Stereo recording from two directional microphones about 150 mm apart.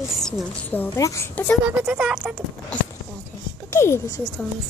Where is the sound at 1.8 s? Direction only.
5° right (ahead or behind).